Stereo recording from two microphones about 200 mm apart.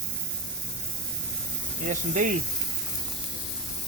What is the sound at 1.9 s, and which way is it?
Speech, 40° right (ahead or behind).